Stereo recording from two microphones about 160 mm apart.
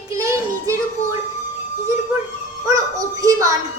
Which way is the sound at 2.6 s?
20° right (ahead or behind).